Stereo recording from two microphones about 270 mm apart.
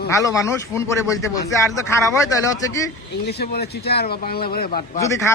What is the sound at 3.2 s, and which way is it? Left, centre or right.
Speech, left.